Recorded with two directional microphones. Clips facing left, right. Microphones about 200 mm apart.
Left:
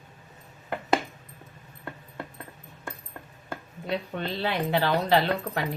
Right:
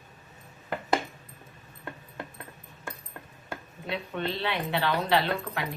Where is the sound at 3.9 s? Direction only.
40° left (ahead or behind).